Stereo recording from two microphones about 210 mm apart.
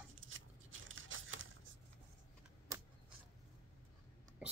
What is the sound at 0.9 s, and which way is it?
Crumpling, 70° right (ahead or behind).